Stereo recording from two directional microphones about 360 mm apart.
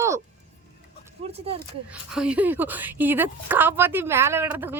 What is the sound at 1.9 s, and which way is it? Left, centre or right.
A woman's voice, centre.